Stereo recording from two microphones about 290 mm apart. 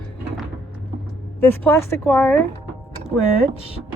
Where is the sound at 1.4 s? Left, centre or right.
Centre.